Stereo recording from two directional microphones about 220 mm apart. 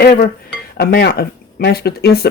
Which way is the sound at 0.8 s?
45° left (ahead or behind).